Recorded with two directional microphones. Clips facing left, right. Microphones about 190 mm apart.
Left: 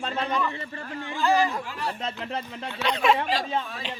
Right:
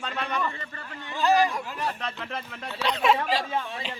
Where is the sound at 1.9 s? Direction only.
25° left (ahead or behind).